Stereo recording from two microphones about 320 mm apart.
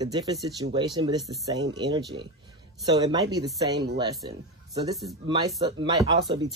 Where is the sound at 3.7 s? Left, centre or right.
Right.